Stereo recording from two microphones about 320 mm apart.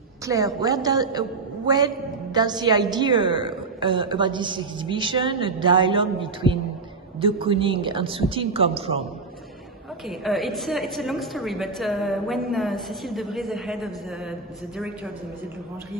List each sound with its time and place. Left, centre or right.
0.2 s a woman's voice: centre
2.3 s a woman's voice: centre
10.0 s a woman's voice: centre